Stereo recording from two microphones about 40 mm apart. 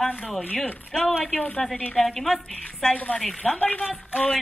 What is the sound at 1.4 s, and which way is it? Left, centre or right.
Speech, left.